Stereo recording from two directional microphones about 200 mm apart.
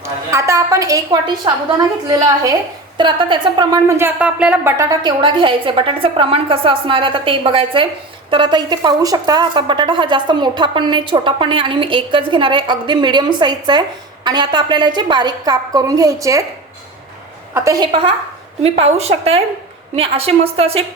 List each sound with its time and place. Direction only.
0.0 s a woman's voice: 15° right (ahead or behind)
17.5 s speech: 15° right (ahead or behind)